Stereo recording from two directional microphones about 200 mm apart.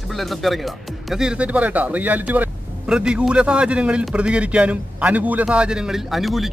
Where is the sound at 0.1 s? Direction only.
Centre (ahead or behind).